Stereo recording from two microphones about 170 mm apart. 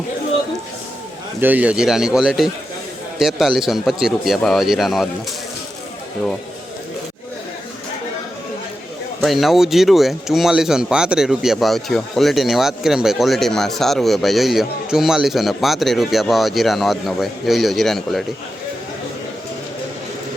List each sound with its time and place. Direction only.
1.4 s speech: 10° right (ahead or behind)
9.2 s speech: centre (ahead or behind)